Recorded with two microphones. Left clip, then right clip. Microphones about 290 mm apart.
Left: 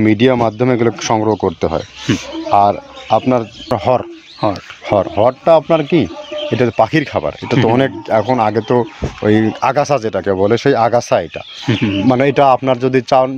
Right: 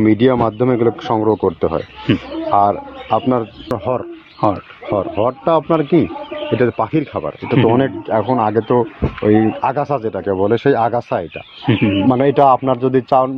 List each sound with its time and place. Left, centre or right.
0.0 s speech: left
11.7 s speech: centre
12.1 s speech: left